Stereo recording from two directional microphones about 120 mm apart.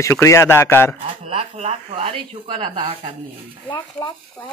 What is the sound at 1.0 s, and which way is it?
Speech, 55° right (ahead or behind).